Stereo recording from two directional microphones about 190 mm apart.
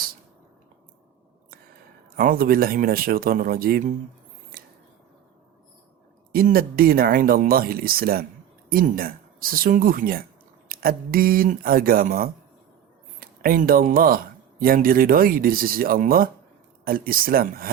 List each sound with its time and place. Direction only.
2.1 s speech: 50° right (ahead or behind)
4.5 s scissors: 50° right (ahead or behind)
6.3 s speech: 50° right (ahead or behind)